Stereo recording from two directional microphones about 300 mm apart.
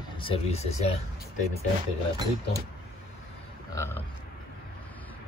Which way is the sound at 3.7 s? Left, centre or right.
Centre.